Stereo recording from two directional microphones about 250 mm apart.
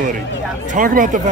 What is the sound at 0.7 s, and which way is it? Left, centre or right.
Speech, right.